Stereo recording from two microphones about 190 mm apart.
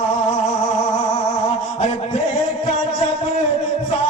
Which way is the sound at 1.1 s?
35° left (ahead or behind).